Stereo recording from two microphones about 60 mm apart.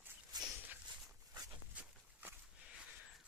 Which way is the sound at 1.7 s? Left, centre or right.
Right.